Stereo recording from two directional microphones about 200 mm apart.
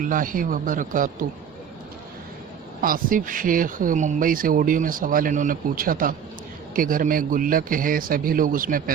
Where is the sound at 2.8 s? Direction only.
45° right (ahead or behind).